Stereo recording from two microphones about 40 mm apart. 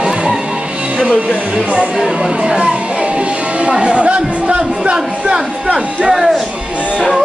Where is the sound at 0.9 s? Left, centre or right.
Right.